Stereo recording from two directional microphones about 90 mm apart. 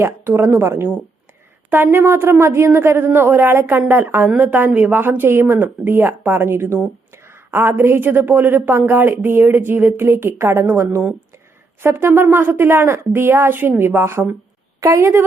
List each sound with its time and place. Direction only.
0.0 s a woman's voice: 30° right (ahead or behind)